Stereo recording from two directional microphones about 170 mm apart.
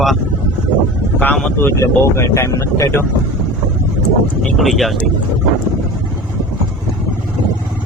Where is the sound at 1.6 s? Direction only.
15° left (ahead or behind).